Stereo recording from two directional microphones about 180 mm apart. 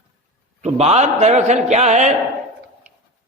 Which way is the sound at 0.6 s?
35° right (ahead or behind).